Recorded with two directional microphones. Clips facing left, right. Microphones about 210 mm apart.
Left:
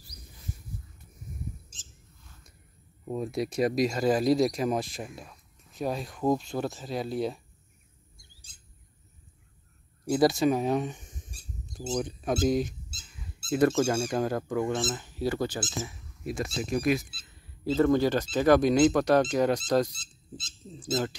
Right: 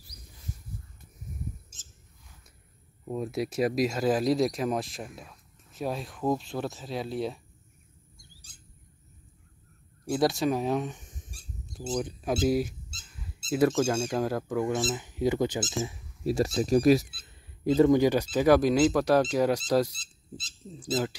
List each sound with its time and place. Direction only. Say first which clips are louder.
1.8 s bird: left 2 dB; 10° right (ahead or behind)
3.1 s speech: even; centre (ahead or behind)
10.0 s speech: left 3 dB; centre (ahead or behind)
12.4 s a sound: right 1 dB; 5° right (ahead or behind)
13.5 s speech: even; centre (ahead or behind); by 15.6 s 20° right (ahead or behind)
15.8 s a sound: right 5 dB; 25° right (ahead or behind)
16.3 s speech: right 6 dB; 35° right (ahead or behind)
17.6 s speech: right 3 dB; 15° right (ahead or behind)
20.0 s speech: even; 35° right (ahead or behind)
20.9 s speech: even; 5° right (ahead or behind)